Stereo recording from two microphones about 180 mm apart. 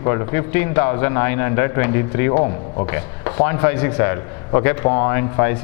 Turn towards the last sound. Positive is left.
turn(degrees=15)  # may be behind; listen again after turning